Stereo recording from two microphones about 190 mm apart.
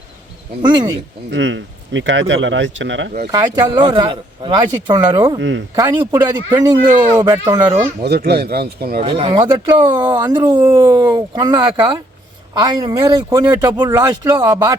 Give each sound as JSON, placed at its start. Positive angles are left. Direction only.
{"t": 1.3, "sound": "speech", "side_deg": -70}
{"t": 3.3, "sound": "speech", "side_deg": -25}
{"t": 5.4, "sound": "speech", "side_deg": -70}
{"t": 5.7, "sound": "speech", "side_deg": -20}
{"t": 8.0, "sound": "speech", "side_deg": -55}
{"t": 9.0, "sound": "speech", "side_deg": -30}